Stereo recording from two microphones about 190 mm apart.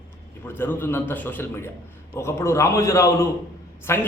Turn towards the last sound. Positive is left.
turn(degrees=15)  # may be behind; listen again after turning